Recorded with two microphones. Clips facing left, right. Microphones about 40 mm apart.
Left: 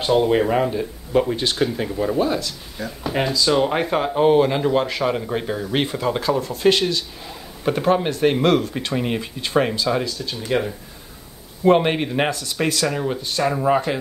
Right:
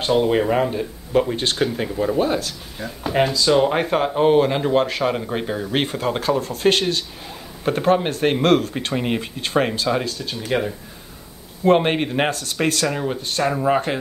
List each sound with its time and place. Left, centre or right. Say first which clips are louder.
0.0 s speech: left 1 dB; centre
0.7 s speech: left 1 dB; centre
3.1 s speech: right 2 dB; centre
11.6 s speech: even; centre